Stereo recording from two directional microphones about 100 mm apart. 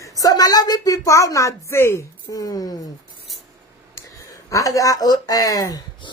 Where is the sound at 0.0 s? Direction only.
40° left (ahead or behind).